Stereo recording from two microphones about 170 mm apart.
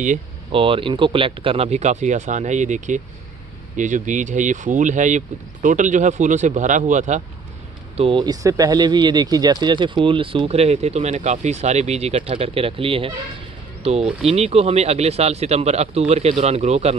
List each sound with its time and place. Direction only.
0.5 s speech: 30° right (ahead or behind)
7.9 s speech: 35° right (ahead or behind)